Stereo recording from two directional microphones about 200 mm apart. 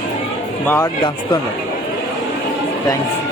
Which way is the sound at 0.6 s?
10° left (ahead or behind).